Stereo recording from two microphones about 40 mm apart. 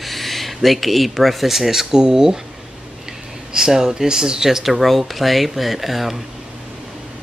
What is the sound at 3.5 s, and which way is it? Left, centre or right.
Speech, centre.